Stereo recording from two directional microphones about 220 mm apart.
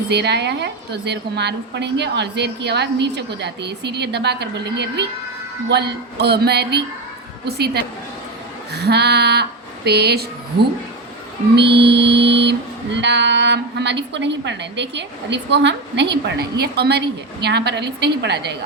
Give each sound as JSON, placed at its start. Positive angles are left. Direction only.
{"t": 0.1, "sound": "music", "side_deg": -50}
{"t": 8.7, "sound": "speech", "side_deg": -50}
{"t": 11.5, "sound": "music", "side_deg": -50}